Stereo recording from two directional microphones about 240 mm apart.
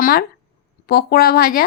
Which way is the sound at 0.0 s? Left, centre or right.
Left.